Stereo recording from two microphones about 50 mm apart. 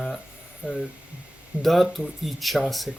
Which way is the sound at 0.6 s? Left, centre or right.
Right.